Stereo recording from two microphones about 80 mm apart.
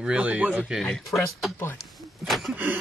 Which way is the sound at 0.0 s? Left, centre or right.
Centre.